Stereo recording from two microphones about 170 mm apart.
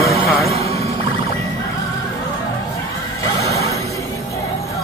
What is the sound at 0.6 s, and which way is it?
Music, 35° right (ahead or behind).